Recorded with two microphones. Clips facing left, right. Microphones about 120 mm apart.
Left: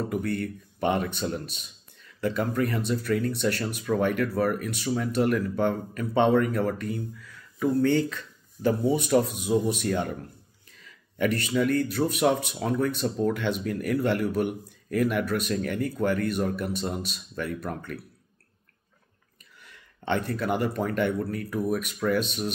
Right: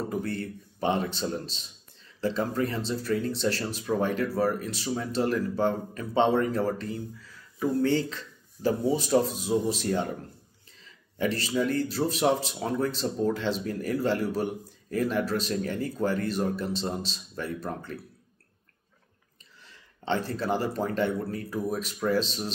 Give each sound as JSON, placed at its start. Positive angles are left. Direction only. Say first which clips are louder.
{"t": 0.1, "sound": "speech", "louder": "left 3 dB", "side_deg": -30}
{"t": 7.8, "sound": "speech", "louder": "left 2 dB", "side_deg": 55}
{"t": 8.9, "sound": "speech", "louder": "left 1 dB", "side_deg": -30}
{"t": 11.3, "sound": "speech", "louder": "left 3 dB", "side_deg": -30}
{"t": 20.3, "sound": "speech", "louder": "left 1 dB", "side_deg": -30}